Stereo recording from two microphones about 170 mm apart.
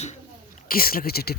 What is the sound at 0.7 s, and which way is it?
Speech, 60° left (ahead or behind).